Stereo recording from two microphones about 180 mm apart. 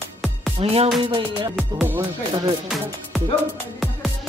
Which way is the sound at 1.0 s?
30° right (ahead or behind).